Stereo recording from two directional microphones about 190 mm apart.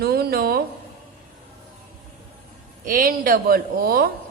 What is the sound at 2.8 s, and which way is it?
A woman's voice, 50° right (ahead or behind).